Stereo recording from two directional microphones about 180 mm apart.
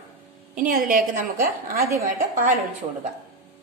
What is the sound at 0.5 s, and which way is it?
A woman's voice, 45° right (ahead or behind).